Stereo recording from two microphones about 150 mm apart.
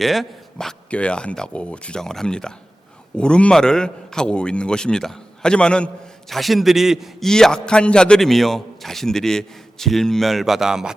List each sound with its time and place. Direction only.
0.0 s a man's voice: centre (ahead or behind)